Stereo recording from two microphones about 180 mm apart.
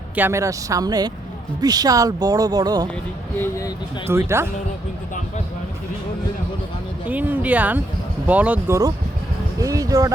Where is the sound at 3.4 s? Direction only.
20° left (ahead or behind).